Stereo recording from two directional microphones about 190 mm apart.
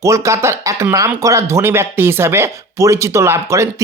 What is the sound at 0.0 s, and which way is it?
Speech, 15° right (ahead or behind).